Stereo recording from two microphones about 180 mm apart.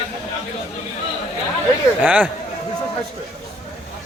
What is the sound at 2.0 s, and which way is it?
Speech, 10° right (ahead or behind).